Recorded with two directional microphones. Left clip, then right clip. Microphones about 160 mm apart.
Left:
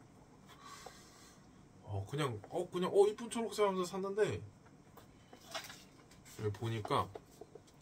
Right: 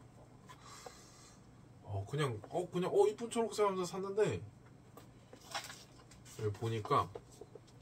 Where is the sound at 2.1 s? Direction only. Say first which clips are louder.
Right 1 dB; 45° left (ahead or behind).